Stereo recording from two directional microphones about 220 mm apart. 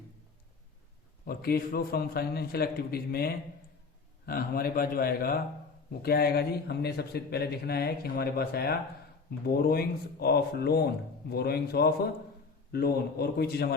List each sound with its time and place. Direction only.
1.2 s a man's voice: 45° left (ahead or behind)